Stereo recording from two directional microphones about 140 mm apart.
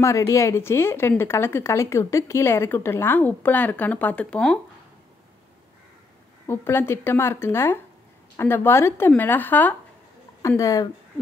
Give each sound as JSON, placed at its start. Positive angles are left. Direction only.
{"t": 0.0, "sound": "a woman's voice", "side_deg": 20}
{"t": 6.4, "sound": "a woman's voice", "side_deg": 15}